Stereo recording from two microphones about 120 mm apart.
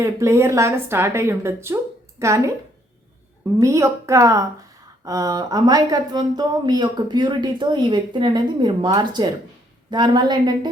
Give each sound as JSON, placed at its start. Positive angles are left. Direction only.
{"t": 0.0, "sound": "speech", "side_deg": -25}
{"t": 3.6, "sound": "speech", "side_deg": -25}